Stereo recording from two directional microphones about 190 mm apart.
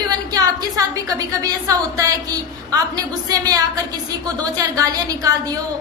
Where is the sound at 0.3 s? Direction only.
20° right (ahead or behind).